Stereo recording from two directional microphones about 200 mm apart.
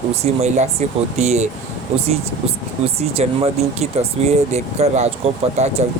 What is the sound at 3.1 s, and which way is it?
Speech, 30° right (ahead or behind).